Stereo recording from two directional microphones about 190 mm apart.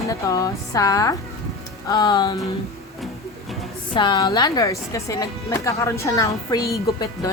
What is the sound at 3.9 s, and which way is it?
Speech, 25° left (ahead or behind).